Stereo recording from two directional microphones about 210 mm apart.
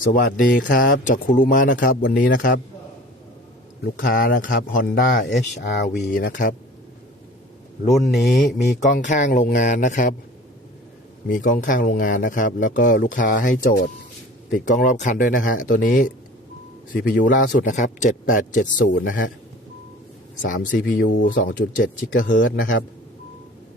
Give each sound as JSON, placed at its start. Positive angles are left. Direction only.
{"t": 0.1, "sound": "speech", "side_deg": 40}
{"t": 3.8, "sound": "speech", "side_deg": 45}
{"t": 5.3, "sound": "speech", "side_deg": 55}
{"t": 6.0, "sound": "speech", "side_deg": 40}
{"t": 8.2, "sound": "speech", "side_deg": 40}
{"t": 11.3, "sound": "speech", "side_deg": 40}
{"t": 20.4, "sound": "speech", "side_deg": 40}